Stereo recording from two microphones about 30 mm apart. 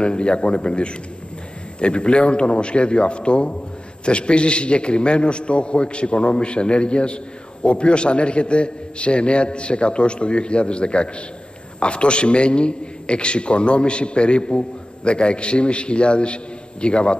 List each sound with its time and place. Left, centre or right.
0.0 s a man's voice: left